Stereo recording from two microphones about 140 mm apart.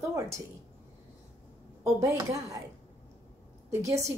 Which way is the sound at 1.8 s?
20° right (ahead or behind).